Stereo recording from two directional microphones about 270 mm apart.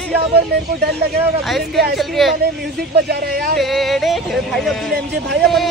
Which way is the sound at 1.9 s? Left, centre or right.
Centre.